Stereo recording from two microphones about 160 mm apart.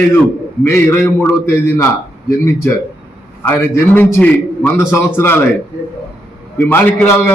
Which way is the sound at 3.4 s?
10° left (ahead or behind).